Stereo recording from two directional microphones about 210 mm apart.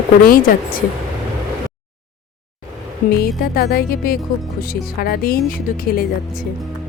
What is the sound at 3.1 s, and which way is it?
Speech, 50° left (ahead or behind).